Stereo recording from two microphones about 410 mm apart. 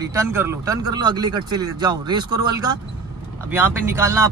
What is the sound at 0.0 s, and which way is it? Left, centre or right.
Speech, centre.